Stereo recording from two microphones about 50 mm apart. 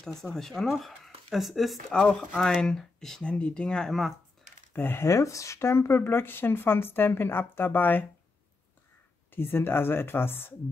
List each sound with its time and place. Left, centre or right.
0.0 s speech: centre
1.9 s speech: left
3.3 s speech: left
4.7 s speech: left
5.0 s speech: left
9.3 s speech: left